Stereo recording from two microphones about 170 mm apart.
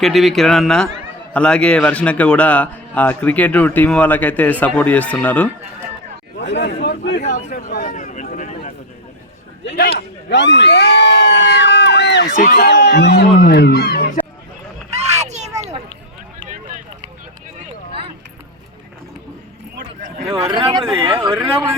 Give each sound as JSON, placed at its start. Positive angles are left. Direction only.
{"t": 0.0, "sound": "a man's voice", "side_deg": 0}
{"t": 6.4, "sound": "speech", "side_deg": 90}
{"t": 7.2, "sound": "speech", "side_deg": 45}
{"t": 7.5, "sound": "a sound", "side_deg": 60}
{"t": 9.6, "sound": "speech", "side_deg": 75}
{"t": 10.2, "sound": "crowd", "side_deg": 90}
{"t": 12.3, "sound": "speech", "side_deg": 55}
{"t": 12.5, "sound": "speech", "side_deg": 80}
{"t": 15.1, "sound": "a sound", "side_deg": -40}
{"t": 20.5, "sound": "speech", "side_deg": -30}
{"t": 21.0, "sound": "speech", "side_deg": -15}
{"t": 21.4, "sound": "speech", "side_deg": -35}